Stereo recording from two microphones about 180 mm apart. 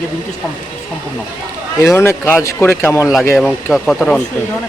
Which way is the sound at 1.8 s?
15° left (ahead or behind).